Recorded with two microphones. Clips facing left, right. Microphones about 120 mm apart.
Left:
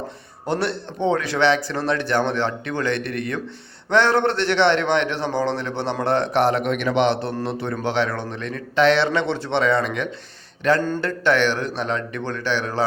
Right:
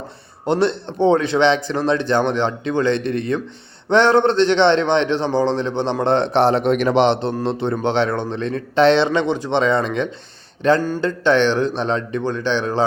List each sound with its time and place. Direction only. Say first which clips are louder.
0.4 s a man's voice: right 6 dB; 20° right (ahead or behind)